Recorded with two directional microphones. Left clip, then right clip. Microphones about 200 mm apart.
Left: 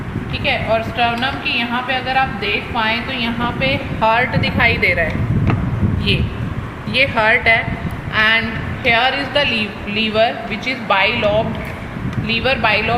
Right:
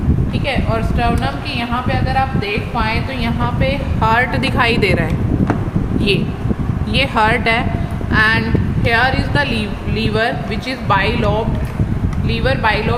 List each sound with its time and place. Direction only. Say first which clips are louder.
0.4 s a woman's voice: left 3 dB; 20° right (ahead or behind)
4.0 s a man's voice: even; 40° right (ahead or behind)
4.4 s speech: even; 55° right (ahead or behind)
6.9 s a man's voice: left 1 dB; 45° right (ahead or behind); by 13.0 s 20° right (ahead or behind)